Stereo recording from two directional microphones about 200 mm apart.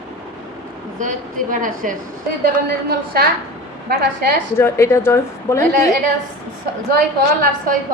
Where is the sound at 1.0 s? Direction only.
40° right (ahead or behind).